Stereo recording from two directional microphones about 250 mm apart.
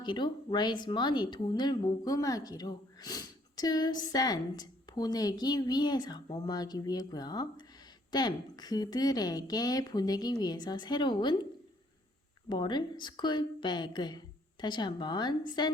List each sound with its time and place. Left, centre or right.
0.0 s speech: centre
12.5 s speech: centre